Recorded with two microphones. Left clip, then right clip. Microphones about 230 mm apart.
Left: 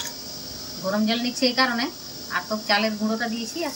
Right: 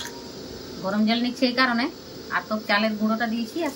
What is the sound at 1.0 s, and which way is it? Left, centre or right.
Speech, centre.